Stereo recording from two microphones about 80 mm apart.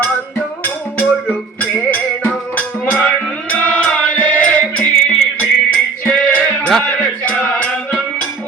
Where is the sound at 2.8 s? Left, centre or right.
Centre.